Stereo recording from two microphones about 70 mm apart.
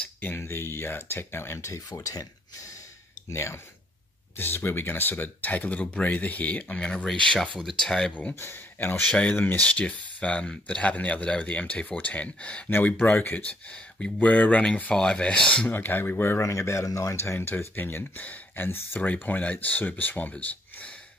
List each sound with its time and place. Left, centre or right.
0.2 s speech: left
1.9 s speech: left
3.3 s speech: left; by 8.1 s centre
8.1 s speech: left
8.4 s speech: left
8.7 s speech: left
13.7 s speech: centre
15.7 s speech: left
16.4 s speech: left
18.7 s speech: left